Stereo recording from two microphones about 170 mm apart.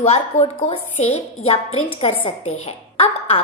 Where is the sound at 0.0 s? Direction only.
35° left (ahead or behind).